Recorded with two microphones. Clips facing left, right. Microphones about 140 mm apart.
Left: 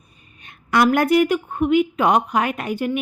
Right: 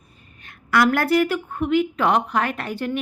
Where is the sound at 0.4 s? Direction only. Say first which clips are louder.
Left 2 dB; 20° left (ahead or behind).